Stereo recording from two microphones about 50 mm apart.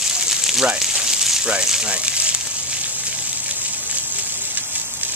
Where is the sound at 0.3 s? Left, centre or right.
Centre.